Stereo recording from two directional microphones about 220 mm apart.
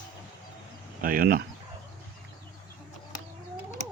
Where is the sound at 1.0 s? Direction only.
40° right (ahead or behind).